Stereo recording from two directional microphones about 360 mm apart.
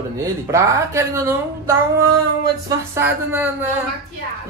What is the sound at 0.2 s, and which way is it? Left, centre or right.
A woman's voice, centre.